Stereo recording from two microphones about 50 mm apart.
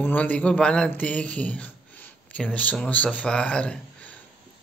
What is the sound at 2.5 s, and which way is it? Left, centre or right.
Speech, left.